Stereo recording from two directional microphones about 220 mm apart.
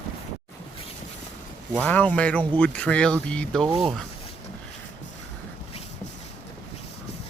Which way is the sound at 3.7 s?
20° right (ahead or behind).